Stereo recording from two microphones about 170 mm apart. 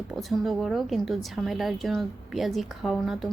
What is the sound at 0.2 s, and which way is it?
Speech, centre (ahead or behind).